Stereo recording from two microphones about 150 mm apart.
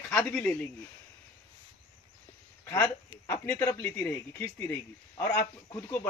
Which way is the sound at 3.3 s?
15° left (ahead or behind).